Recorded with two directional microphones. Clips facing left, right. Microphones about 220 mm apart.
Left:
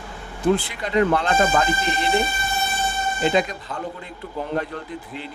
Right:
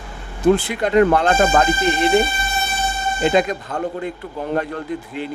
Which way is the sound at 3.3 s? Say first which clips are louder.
Right 4 dB; 50° right (ahead or behind).